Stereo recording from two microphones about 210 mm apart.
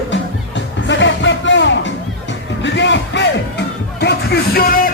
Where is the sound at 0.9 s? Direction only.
60° left (ahead or behind).